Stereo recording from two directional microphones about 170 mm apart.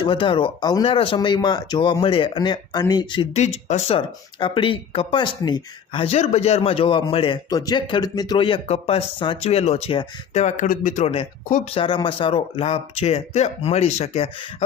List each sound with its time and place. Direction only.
0.0 s speech: 30° left (ahead or behind)
3.3 s speech: 40° left (ahead or behind)